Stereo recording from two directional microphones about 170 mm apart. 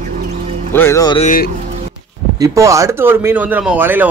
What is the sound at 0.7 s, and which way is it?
Music, 15° left (ahead or behind).